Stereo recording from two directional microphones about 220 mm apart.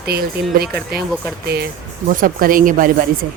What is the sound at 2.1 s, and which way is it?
Speech, 40° right (ahead or behind).